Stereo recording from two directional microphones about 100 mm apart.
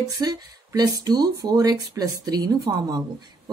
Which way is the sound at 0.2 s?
40° right (ahead or behind).